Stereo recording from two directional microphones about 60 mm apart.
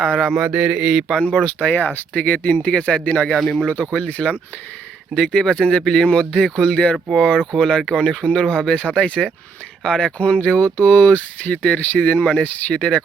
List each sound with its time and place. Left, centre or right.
0.0 s speech: centre
0.3 s mantra: centre
1.5 s speech: left
3.3 s speech: centre
3.7 s speech: left
10.2 s speech: left